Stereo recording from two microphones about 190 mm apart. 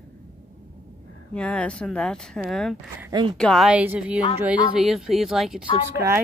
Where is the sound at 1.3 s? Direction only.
5° left (ahead or behind).